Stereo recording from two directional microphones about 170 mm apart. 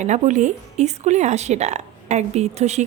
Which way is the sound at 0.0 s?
45° right (ahead or behind).